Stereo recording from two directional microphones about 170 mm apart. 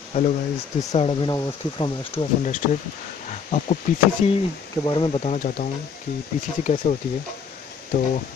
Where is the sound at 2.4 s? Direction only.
50° left (ahead or behind).